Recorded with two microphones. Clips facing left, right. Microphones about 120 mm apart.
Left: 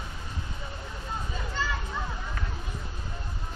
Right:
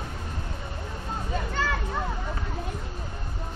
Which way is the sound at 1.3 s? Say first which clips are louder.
Right 6 dB; 55° right (ahead or behind).